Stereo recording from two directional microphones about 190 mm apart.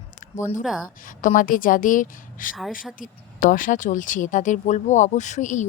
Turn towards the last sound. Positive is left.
turn(degrees=40)  # may be behind; listen again after turning